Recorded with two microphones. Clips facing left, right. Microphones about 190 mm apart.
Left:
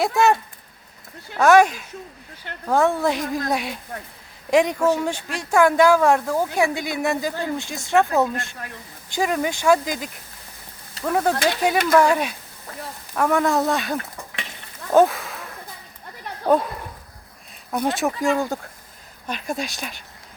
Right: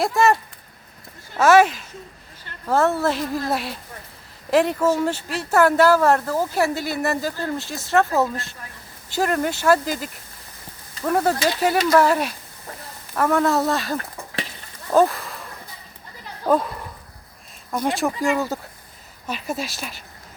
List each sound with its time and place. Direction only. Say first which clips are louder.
0.0 s speech: even; centre (ahead or behind)
1.4 s speech: even; centre (ahead or behind)
2.5 s speech: left 7 dB; 70° left (ahead or behind)
2.8 s a woman's voice: even; 15° left (ahead or behind)
3.3 s speech: even; 5° right (ahead or behind)
14.9 s a sound: left 1 dB; centre (ahead or behind)
16.5 s speech: left 1 dB; centre (ahead or behind)